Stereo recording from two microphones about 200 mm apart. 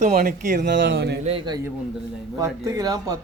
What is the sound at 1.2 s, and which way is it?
Speech, 25° right (ahead or behind).